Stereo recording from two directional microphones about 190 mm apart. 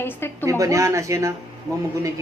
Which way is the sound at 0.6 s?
15° right (ahead or behind).